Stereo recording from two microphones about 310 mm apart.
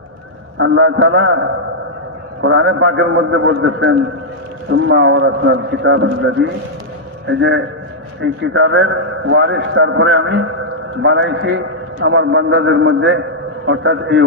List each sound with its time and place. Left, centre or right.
0.6 s a man's voice: right